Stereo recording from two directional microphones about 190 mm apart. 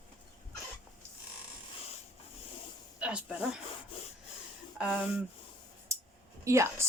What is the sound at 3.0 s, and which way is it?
Speech, 5° right (ahead or behind).